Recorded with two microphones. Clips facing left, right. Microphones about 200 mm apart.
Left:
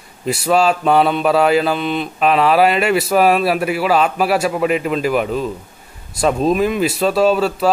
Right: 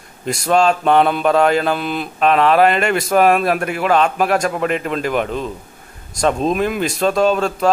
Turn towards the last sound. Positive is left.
turn(degrees=5)  # may be behind; listen again after turning